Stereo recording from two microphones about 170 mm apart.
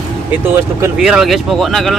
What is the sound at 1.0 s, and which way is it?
Speech, 5° right (ahead or behind).